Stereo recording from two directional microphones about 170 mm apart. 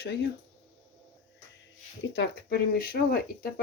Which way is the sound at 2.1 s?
80° left.